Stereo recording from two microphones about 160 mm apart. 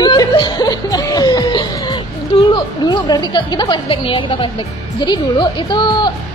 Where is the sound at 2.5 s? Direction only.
30° left (ahead or behind).